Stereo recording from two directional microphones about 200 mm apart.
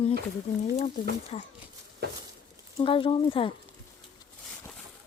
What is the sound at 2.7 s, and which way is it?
Speech, 25° left (ahead or behind).